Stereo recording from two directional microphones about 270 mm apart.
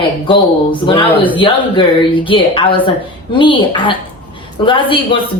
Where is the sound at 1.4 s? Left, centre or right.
Centre.